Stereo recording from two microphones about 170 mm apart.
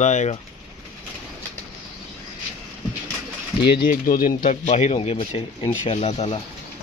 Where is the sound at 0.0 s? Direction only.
45° left (ahead or behind).